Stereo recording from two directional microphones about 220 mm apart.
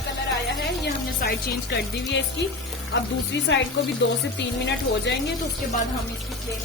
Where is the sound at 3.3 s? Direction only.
55° left (ahead or behind).